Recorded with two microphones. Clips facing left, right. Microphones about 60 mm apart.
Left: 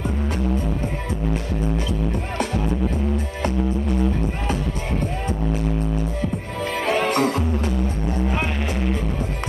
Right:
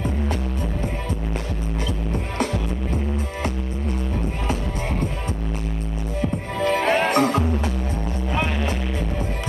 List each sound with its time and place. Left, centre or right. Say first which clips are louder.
6.6 s music: right 3 dB; right